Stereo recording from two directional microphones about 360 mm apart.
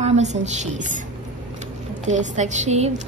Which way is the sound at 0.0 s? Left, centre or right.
Centre.